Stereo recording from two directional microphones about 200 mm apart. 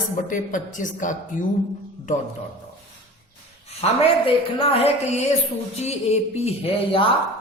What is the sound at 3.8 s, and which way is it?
A woman's voice, 25° left (ahead or behind).